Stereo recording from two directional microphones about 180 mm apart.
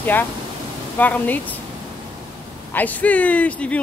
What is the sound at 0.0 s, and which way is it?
Speech, 10° left (ahead or behind).